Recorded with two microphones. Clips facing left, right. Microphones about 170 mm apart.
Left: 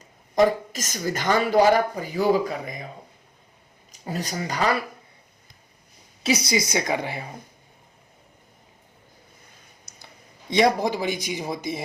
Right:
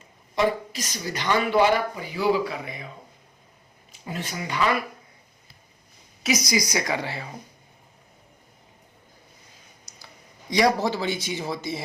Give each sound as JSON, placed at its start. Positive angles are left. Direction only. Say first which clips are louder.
{"t": 0.3, "sound": "speech", "louder": "left 4 dB", "side_deg": 45}
{"t": 3.9, "sound": "speech", "louder": "left 3 dB", "side_deg": 40}
{"t": 6.2, "sound": "a woman's voice", "louder": "left 1 dB", "side_deg": 30}
{"t": 10.5, "sound": "speech", "louder": "left 1 dB", "side_deg": 20}